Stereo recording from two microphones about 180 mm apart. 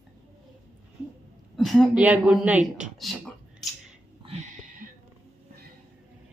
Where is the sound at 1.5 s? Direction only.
Centre (ahead or behind).